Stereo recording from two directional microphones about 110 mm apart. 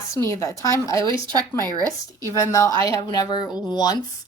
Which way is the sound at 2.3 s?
30° left (ahead or behind).